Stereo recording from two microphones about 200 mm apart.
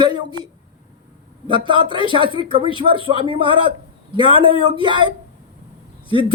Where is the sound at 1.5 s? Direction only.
25° right (ahead or behind).